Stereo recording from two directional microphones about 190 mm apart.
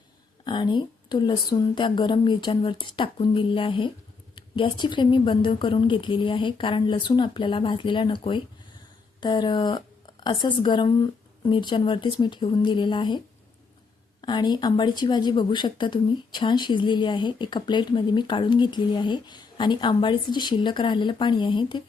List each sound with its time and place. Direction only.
0.4 s a woman's voice: 25° left (ahead or behind)